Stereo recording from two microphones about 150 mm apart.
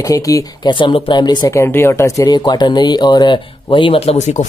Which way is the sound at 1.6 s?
15° left (ahead or behind).